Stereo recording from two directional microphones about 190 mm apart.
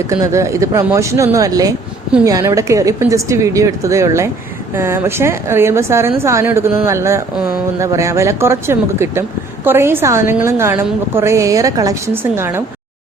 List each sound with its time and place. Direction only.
0.1 s a woman's voice: 15° right (ahead or behind)